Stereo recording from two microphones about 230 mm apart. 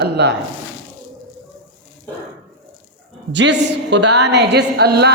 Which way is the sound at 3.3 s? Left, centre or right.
Right.